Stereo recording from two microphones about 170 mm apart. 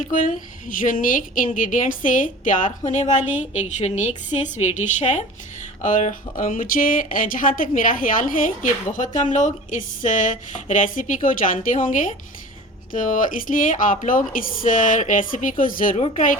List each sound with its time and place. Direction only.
0.1 s a woman's voice: 50° left (ahead or behind)
16.0 s speech: 40° left (ahead or behind)